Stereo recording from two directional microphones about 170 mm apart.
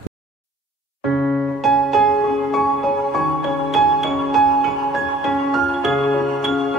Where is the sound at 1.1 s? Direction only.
Centre (ahead or behind).